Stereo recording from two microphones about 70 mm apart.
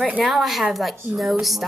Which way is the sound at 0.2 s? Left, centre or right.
Centre.